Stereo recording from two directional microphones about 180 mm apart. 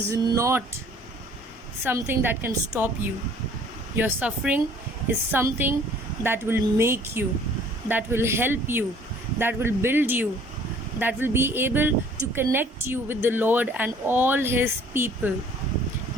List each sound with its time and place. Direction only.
0.1 s a woman's voice: 20° right (ahead or behind)
1.8 s a woman's voice: 10° right (ahead or behind)